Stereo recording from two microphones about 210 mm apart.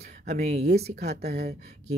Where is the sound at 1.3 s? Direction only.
50° right (ahead or behind).